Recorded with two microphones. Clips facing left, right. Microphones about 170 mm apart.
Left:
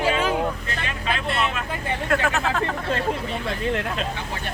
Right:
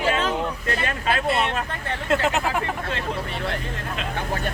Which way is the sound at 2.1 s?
20° right (ahead or behind).